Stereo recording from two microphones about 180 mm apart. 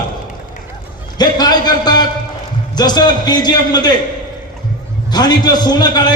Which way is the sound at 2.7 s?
25° left (ahead or behind).